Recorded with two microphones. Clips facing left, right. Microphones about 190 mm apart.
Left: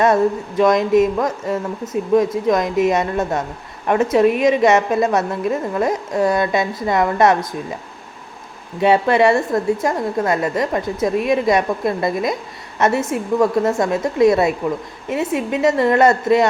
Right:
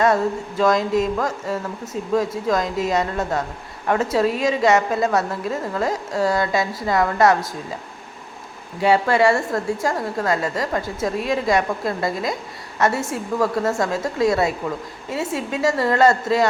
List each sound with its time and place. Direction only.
0.0 s a woman's voice: 20° left (ahead or behind)
8.8 s a woman's voice: 20° left (ahead or behind)